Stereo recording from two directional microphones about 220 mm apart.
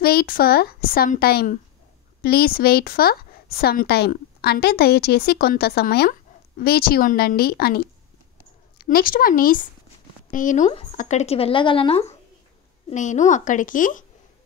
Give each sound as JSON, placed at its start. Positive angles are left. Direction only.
{"t": 0.0, "sound": "a woman's voice", "side_deg": 45}